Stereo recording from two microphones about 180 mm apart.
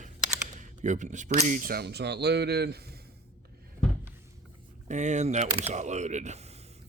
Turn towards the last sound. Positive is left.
turn(degrees=-35)  # may be behind; listen again after turning